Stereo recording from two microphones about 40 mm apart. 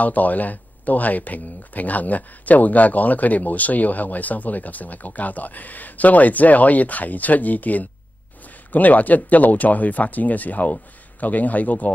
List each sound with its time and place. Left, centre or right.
0.0 s speech: left